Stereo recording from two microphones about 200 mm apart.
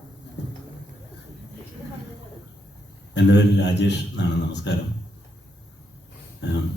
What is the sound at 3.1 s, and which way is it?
A man's voice, 60° left (ahead or behind).